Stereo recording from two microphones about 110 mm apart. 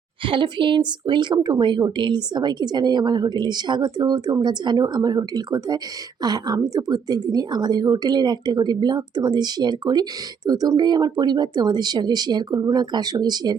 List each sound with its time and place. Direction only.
0.3 s speech: 50° right (ahead or behind)